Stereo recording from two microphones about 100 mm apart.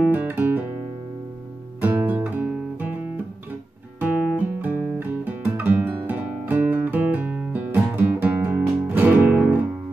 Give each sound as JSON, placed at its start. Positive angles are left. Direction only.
{"t": 0.1, "sound": "guitar", "side_deg": -15}
{"t": 1.8, "sound": "guitar", "side_deg": -20}